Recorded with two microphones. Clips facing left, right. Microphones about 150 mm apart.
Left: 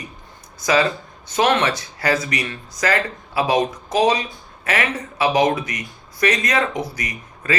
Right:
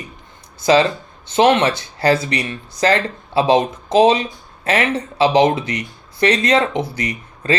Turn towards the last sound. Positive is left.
turn(degrees=-30)  # may be behind; listen again after turning